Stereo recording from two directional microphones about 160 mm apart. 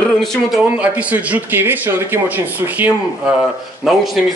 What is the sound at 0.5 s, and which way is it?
A man's voice, 10° right (ahead or behind).